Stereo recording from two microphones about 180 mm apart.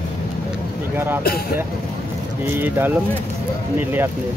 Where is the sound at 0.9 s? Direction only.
10° right (ahead or behind).